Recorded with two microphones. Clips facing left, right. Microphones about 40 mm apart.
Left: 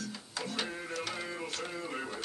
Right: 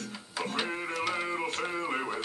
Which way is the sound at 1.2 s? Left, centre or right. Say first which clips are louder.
Right 6 dB; right.